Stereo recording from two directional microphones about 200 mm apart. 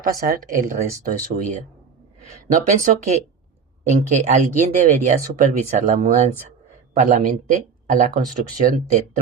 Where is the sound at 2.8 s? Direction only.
35° right (ahead or behind).